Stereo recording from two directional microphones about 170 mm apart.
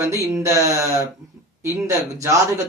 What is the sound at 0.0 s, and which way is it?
Speech, 15° right (ahead or behind).